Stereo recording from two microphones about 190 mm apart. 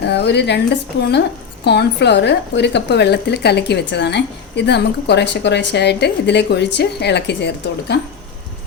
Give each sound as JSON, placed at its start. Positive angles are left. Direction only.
{"t": 0.0, "sound": "a woman's voice", "side_deg": 65}